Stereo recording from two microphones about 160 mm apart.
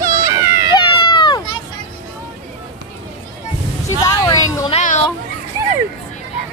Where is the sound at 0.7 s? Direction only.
30° left (ahead or behind).